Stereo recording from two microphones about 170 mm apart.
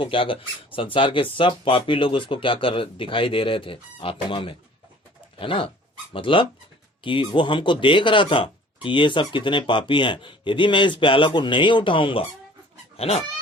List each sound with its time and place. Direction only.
0.0 s speech: 30° left (ahead or behind)